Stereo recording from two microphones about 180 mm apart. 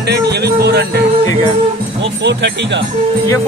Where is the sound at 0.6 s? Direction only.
60° right (ahead or behind).